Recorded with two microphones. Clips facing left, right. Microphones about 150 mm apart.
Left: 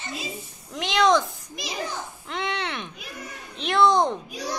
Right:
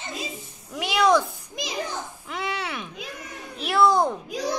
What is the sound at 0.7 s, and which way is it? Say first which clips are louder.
Speech: even; 10° right (ahead or behind).